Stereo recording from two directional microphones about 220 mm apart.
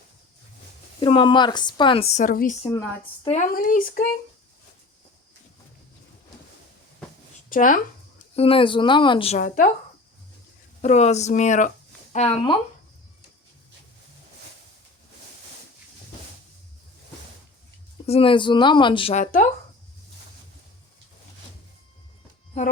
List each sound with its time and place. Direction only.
0.9 s a woman's voice: 20° left (ahead or behind); by 4.1 s 40° left (ahead or behind)
7.5 s speech: 35° left (ahead or behind)
8.4 s a woman's voice: 25° left (ahead or behind)
10.8 s a woman's voice: 30° left (ahead or behind)
18.0 s a woman's voice: 25° left (ahead or behind)